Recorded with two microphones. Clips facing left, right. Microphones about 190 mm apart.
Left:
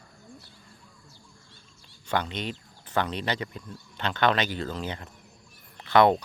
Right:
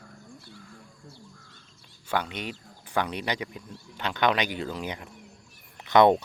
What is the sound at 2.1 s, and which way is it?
Speech, 10° right (ahead or behind).